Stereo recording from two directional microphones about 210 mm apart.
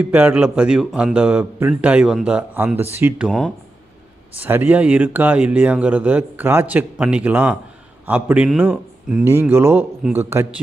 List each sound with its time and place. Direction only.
0.0 s a man's voice: 10° right (ahead or behind)